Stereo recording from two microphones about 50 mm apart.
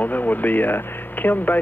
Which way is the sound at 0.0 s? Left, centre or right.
Left.